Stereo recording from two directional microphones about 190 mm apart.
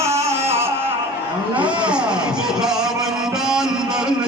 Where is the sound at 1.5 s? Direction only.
5° right (ahead or behind).